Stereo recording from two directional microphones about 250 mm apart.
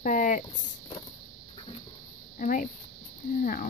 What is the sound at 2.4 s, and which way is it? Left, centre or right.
Speech, left.